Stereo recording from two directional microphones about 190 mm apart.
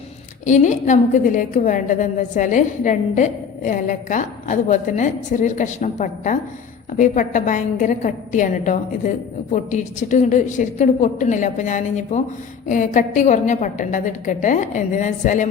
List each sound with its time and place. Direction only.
0.4 s a woman's voice: 40° left (ahead or behind)